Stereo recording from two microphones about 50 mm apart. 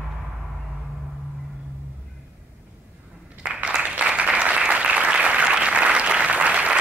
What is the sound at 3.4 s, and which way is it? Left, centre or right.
Applause, right.